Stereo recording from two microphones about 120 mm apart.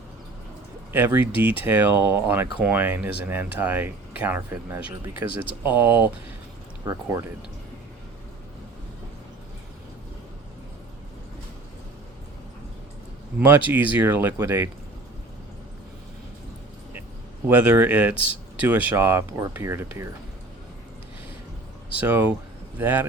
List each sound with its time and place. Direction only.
0.9 s speech: 15° right (ahead or behind)
6.8 s speech: 25° right (ahead or behind)
13.4 s speech: 15° right (ahead or behind)
17.5 s speech: 15° right (ahead or behind)
22.0 s speech: 15° right (ahead or behind)